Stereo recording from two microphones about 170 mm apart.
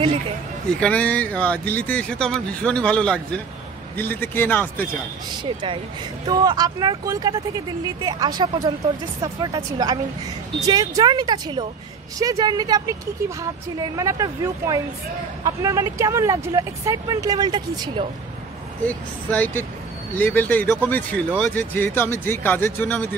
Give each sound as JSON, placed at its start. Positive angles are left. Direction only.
{"t": 0.7, "sound": "speech", "side_deg": 5}
{"t": 5.3, "sound": "speech", "side_deg": -25}
{"t": 18.9, "sound": "speech", "side_deg": 10}